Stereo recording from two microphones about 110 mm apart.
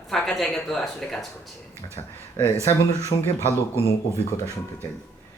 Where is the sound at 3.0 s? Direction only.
25° right (ahead or behind).